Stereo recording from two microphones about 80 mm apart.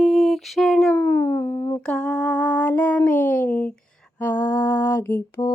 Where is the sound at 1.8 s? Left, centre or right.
Centre.